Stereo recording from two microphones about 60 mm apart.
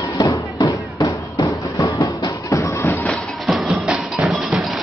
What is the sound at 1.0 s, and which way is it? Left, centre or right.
Music, left.